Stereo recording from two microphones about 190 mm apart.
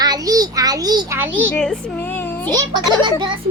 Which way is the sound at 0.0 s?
20° right (ahead or behind).